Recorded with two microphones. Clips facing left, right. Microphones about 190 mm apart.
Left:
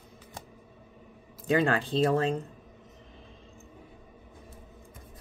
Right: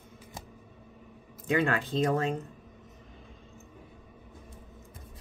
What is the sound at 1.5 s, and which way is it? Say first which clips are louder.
Speech: left 2 dB; 30° left (ahead or behind).